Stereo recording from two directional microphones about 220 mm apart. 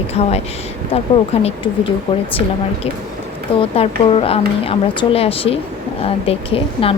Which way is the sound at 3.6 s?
25° left (ahead or behind).